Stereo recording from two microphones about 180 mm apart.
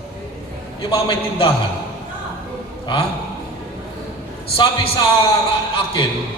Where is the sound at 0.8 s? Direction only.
30° left (ahead or behind).